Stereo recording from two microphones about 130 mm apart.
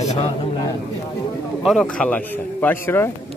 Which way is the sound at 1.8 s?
10° left (ahead or behind).